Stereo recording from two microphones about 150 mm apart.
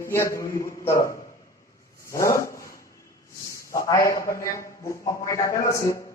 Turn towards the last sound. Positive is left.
turn(degrees=20)  # may be behind; listen again after turning